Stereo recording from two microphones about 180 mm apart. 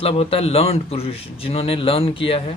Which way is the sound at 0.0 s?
35° left (ahead or behind).